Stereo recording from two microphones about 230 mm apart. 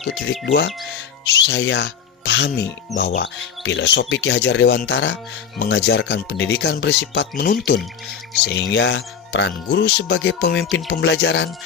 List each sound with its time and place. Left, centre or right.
0.4 s speech: left